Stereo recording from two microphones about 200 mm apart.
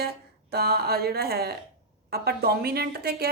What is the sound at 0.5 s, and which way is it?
A woman's voice, 50° right (ahead or behind).